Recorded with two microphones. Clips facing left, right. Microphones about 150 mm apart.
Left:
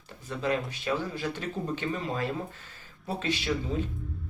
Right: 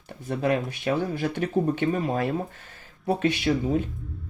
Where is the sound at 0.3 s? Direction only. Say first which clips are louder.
Right 5 dB; 60° right (ahead or behind).